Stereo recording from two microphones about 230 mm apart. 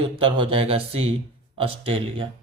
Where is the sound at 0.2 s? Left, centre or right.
Right.